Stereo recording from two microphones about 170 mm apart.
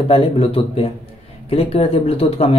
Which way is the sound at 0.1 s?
35° left (ahead or behind).